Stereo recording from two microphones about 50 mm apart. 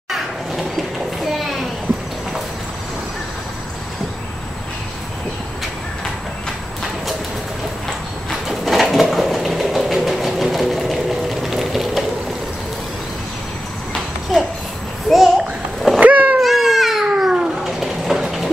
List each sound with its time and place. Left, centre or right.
1.3 s a sound: centre
8.5 s bird: centre
15.0 s a sound: centre
16.0 s cat: right
16.3 s baby cry: centre
17.1 s cat: centre